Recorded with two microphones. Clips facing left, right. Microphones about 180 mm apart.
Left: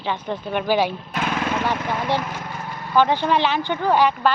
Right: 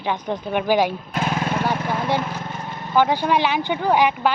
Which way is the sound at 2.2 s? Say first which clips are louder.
Right 2 dB; 25° right (ahead or behind).